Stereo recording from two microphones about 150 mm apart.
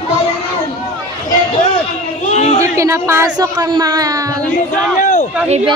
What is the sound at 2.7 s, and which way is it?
Speech, 20° right (ahead or behind).